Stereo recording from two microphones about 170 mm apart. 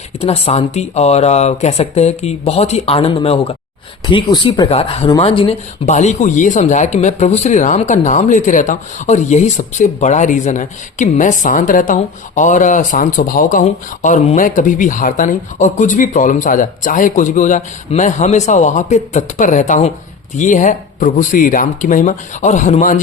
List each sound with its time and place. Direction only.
0.2 s speech: 35° left (ahead or behind)